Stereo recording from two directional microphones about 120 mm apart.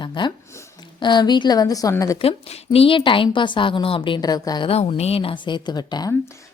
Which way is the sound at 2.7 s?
50° left (ahead or behind).